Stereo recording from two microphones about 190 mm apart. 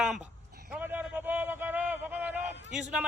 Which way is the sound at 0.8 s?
10° right (ahead or behind).